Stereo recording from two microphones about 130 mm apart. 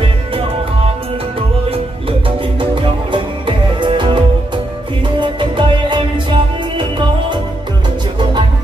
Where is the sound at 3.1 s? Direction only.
40° right (ahead or behind).